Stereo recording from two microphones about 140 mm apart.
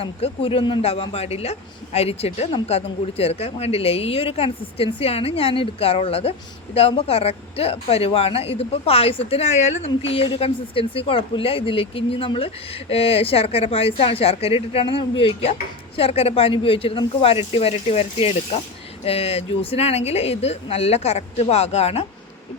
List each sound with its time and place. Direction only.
0.0 s speech: 40° left (ahead or behind)